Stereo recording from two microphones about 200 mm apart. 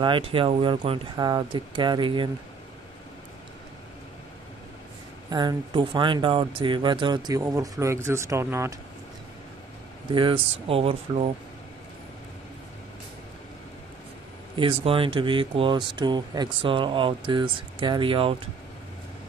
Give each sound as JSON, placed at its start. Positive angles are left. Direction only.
{"t": 0.0, "sound": "speech", "side_deg": -25}
{"t": 5.3, "sound": "speech", "side_deg": -20}
{"t": 10.1, "sound": "speech", "side_deg": -25}
{"t": 14.5, "sound": "speech", "side_deg": -25}